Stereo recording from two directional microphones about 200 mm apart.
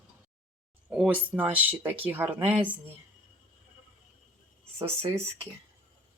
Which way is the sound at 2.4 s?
25° right (ahead or behind).